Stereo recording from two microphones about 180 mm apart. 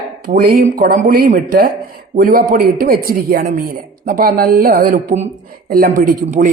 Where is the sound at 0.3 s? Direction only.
55° right (ahead or behind).